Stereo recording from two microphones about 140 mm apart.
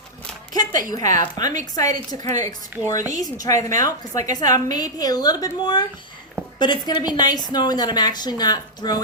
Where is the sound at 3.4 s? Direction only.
25° left (ahead or behind).